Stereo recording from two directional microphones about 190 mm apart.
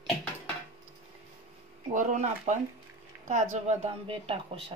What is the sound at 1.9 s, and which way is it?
Speech, 40° right (ahead or behind).